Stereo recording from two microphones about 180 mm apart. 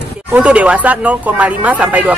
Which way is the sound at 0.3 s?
5° right (ahead or behind).